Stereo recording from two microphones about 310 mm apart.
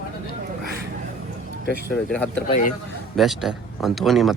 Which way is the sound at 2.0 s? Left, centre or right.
Centre.